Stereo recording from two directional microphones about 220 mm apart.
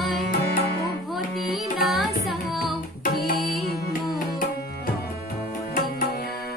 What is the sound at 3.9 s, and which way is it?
Music, 40° left (ahead or behind).